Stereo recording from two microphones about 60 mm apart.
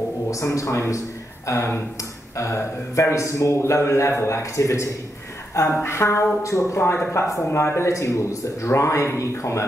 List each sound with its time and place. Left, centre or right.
0.3 s speech: left
5.5 s a sound: left
5.9 s speech: left